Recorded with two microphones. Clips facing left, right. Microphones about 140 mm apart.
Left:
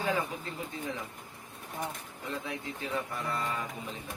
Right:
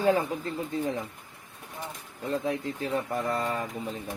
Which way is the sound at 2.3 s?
40° right (ahead or behind).